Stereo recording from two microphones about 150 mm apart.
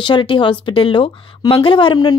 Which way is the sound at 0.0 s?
35° left (ahead or behind).